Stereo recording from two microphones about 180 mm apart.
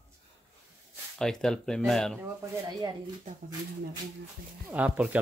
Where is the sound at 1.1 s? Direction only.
5° left (ahead or behind).